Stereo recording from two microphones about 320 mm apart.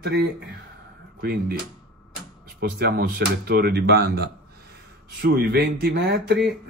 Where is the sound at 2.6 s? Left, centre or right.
Right.